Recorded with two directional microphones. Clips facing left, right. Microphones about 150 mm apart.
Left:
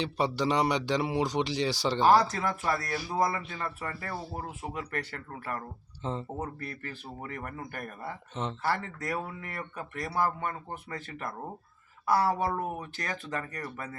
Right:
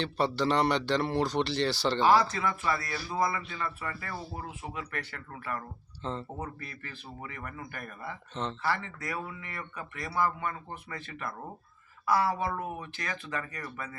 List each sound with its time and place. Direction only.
0.0 s speech: 10° left (ahead or behind)
2.0 s speech: 40° left (ahead or behind)
6.0 s speech: 15° left (ahead or behind)
6.4 s speech: 45° left (ahead or behind)